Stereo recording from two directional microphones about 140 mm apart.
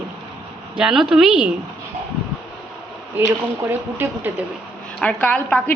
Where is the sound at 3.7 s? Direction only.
15° right (ahead or behind).